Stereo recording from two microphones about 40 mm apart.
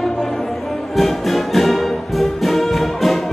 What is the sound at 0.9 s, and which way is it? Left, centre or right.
Music, centre.